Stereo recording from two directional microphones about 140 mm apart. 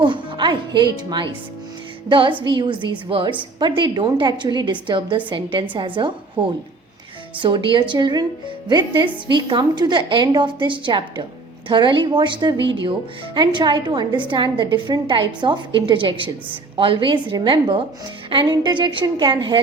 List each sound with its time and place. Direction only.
0.0 s a woman's voice: 35° right (ahead or behind)